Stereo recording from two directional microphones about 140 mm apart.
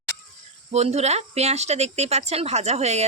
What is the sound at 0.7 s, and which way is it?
Speech, 50° right (ahead or behind).